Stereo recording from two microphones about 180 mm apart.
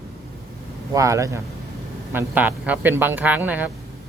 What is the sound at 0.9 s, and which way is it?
Speech, 15° right (ahead or behind).